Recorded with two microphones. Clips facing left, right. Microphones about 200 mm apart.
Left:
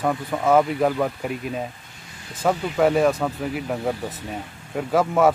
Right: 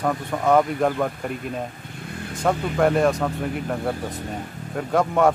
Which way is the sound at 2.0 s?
55° right (ahead or behind).